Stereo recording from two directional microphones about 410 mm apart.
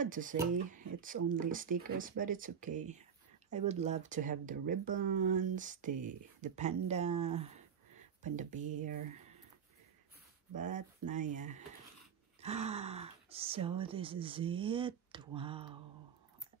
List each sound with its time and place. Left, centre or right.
0.0 s speech: centre
10.5 s speech: centre